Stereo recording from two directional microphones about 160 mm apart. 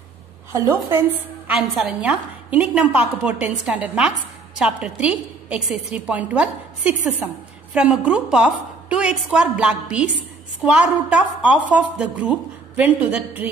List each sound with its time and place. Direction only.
0.5 s a woman's voice: 15° right (ahead or behind)
1.5 s a woman's voice: 5° right (ahead or behind)